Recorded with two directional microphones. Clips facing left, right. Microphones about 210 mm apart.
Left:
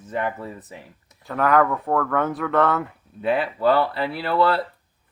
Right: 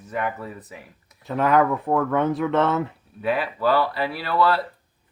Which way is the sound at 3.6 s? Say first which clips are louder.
Left 1 dB; 25° left (ahead or behind).